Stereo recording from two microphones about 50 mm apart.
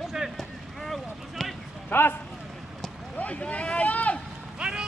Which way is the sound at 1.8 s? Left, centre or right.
Left.